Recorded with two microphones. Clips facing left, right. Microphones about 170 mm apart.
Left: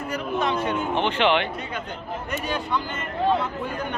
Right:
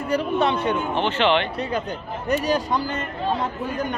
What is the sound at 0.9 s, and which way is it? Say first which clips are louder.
Speech: even; 15° left (ahead or behind).